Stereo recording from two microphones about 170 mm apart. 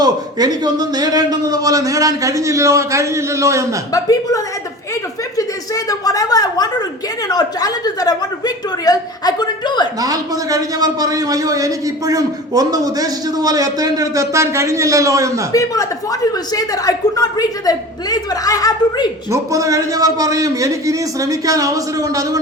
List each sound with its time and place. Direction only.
0.0 s a man's voice: 25° right (ahead or behind)
3.9 s a woman's voice: 20° left (ahead or behind)
10.0 s a man's voice: 20° right (ahead or behind)
15.5 s a woman's voice: 20° left (ahead or behind)
19.3 s a man's voice: 20° right (ahead or behind)